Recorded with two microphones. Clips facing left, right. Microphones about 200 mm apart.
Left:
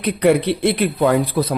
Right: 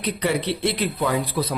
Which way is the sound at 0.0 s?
55° left (ahead or behind).